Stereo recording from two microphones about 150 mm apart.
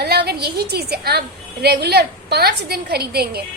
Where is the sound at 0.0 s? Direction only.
90° right.